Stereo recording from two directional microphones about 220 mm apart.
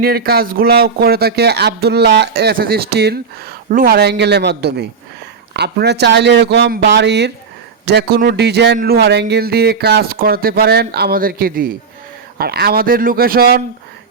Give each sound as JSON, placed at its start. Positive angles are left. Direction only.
{"t": 0.0, "sound": "speech", "side_deg": -45}